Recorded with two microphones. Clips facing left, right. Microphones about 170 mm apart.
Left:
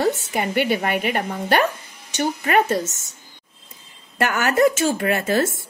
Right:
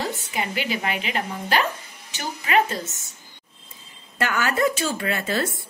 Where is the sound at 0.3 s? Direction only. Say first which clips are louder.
Left 6 dB; 55° left (ahead or behind).